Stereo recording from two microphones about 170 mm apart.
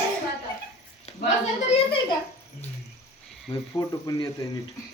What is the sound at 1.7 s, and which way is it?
Speech, 30° left (ahead or behind).